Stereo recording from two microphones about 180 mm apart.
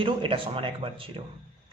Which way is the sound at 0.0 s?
30° right (ahead or behind).